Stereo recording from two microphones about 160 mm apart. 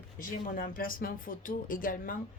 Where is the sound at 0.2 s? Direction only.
60° left (ahead or behind).